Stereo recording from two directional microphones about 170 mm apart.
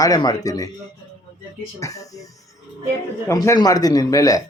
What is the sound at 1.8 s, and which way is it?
Speech, 20° left (ahead or behind).